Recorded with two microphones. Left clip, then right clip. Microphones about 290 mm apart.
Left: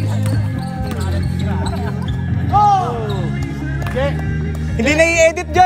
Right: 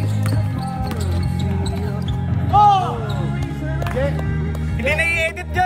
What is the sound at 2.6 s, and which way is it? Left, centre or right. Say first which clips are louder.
Basketball bounce: even; right.